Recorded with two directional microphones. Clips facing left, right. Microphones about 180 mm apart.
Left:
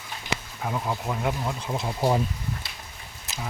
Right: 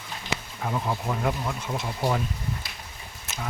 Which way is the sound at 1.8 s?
25° left (ahead or behind).